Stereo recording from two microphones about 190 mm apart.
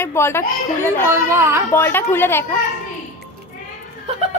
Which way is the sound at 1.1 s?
15° right (ahead or behind).